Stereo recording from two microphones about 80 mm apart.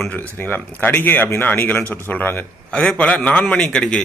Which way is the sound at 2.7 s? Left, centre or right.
Centre.